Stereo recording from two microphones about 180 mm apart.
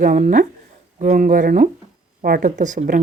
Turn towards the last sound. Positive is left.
turn(degrees=-45)  # may be behind; listen again after turning